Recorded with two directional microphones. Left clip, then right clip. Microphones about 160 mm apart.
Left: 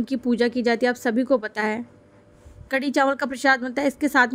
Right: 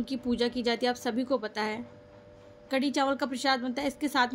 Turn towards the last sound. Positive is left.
turn(degrees=50)  # may be behind; listen again after turning